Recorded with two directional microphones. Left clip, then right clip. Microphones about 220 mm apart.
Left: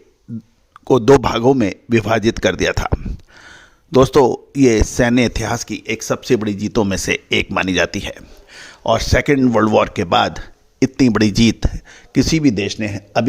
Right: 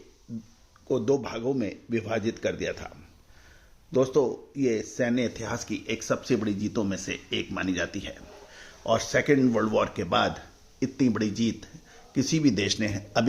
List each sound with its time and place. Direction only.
0.9 s speech: 50° left (ahead or behind)
3.9 s speech: 50° left (ahead or behind); by 13.2 s 35° left (ahead or behind)